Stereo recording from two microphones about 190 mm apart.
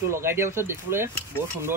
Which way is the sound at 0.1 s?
15° right (ahead or behind).